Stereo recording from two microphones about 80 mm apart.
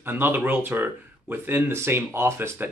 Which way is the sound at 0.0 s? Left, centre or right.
Right.